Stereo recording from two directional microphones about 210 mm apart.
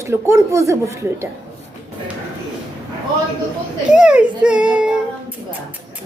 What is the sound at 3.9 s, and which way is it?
Baby cry, 5° right (ahead or behind).